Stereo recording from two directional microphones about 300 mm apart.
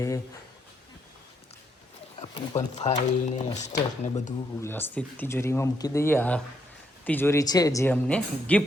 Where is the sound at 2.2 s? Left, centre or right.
Centre.